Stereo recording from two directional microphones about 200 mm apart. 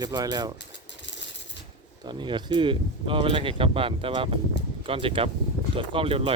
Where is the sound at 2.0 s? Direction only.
25° right (ahead or behind).